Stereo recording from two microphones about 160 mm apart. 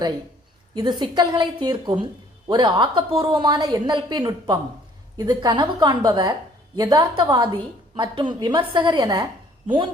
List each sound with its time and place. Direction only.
0.7 s a woman's voice: 25° right (ahead or behind)